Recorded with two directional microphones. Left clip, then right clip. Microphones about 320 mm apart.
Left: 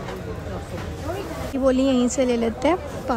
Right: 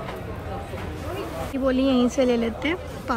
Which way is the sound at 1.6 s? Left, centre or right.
Centre.